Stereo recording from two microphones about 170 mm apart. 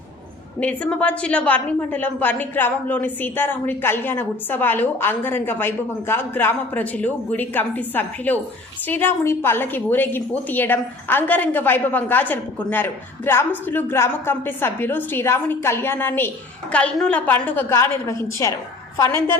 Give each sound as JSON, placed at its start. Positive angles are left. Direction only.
{"t": 0.6, "sound": "a woman's voice", "side_deg": 10}